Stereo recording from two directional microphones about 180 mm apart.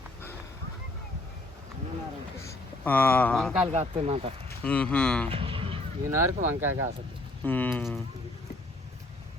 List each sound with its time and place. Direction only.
2.4 s speech: 15° left (ahead or behind)
3.7 s speech: 35° right (ahead or behind)
4.6 s speech: 5° left (ahead or behind)
5.3 s vehicle: 30° right (ahead or behind)
6.1 s speech: 15° right (ahead or behind)
7.4 s speech: 10° left (ahead or behind)